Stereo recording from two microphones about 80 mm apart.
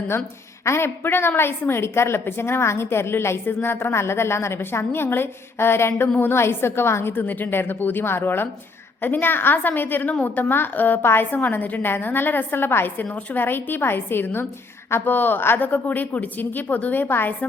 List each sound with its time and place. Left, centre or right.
0.6 s a woman's voice: left